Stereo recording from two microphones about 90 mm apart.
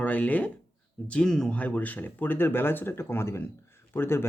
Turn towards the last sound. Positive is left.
turn(degrees=25)  # may be behind; listen again after turning